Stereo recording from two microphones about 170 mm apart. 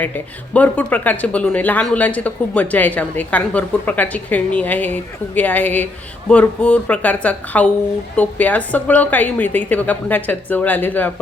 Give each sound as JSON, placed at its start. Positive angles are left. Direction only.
{"t": 0.5, "sound": "speech", "side_deg": 10}